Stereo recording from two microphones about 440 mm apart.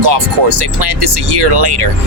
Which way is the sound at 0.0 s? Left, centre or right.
Right.